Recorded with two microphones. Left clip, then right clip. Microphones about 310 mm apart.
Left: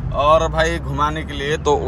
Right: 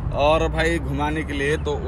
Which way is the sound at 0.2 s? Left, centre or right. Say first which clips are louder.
Left 5 dB; centre.